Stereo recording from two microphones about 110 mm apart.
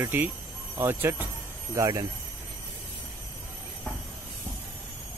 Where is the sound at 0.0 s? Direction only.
20° right (ahead or behind).